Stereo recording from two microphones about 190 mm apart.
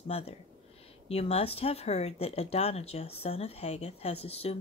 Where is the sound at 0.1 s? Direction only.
30° left (ahead or behind).